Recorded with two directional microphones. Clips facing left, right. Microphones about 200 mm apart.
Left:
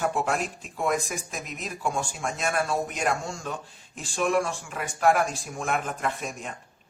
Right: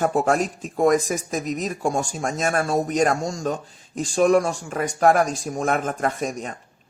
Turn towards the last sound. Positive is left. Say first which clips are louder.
# right 6 dB
turn(degrees=-40)  # may be behind; listen again after turning